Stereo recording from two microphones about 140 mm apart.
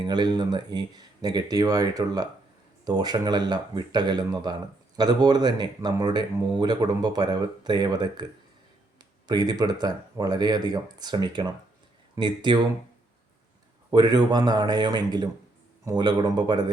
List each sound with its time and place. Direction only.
0.0 s speech: 30° right (ahead or behind)
13.9 s speech: 30° right (ahead or behind)